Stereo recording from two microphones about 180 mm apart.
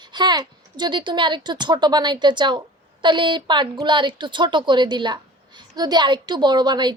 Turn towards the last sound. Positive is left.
turn(degrees=-25)  # may be behind; listen again after turning